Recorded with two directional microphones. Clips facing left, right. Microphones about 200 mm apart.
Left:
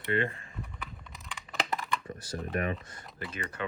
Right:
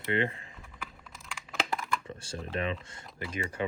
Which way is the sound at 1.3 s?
Centre (ahead or behind).